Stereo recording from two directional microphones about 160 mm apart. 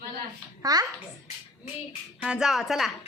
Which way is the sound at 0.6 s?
25° right (ahead or behind).